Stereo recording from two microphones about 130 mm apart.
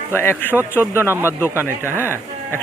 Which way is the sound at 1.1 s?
15° right (ahead or behind).